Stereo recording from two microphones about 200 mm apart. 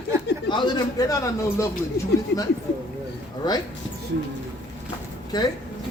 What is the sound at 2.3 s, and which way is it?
Speech, 60° left (ahead or behind).